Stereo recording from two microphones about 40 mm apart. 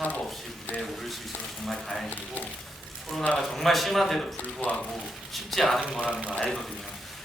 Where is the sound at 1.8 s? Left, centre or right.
Centre.